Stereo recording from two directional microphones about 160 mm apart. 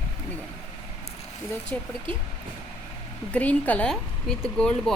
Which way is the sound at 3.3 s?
10° left (ahead or behind).